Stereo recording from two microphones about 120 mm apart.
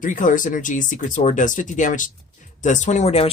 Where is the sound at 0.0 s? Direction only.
90° left.